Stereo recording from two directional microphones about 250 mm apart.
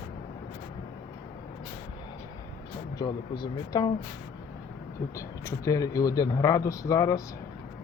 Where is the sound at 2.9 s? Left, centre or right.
Centre.